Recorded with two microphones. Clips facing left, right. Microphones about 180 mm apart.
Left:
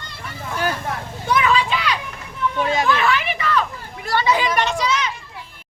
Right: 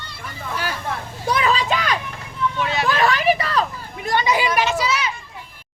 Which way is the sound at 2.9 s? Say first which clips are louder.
Right 2 dB; 35° right (ahead or behind).